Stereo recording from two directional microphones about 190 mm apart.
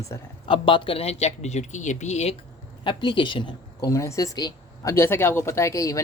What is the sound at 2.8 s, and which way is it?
Speech, 25° left (ahead or behind).